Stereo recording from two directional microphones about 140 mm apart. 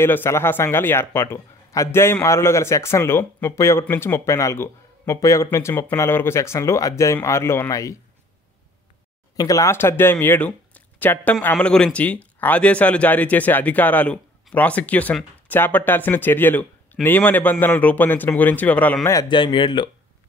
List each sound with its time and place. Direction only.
0.0 s a man's voice: 15° left (ahead or behind)
9.4 s speech: 25° left (ahead or behind)
19.2 s speech: 35° left (ahead or behind)